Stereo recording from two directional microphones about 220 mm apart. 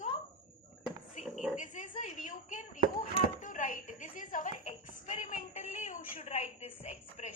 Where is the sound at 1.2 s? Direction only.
5° right (ahead or behind).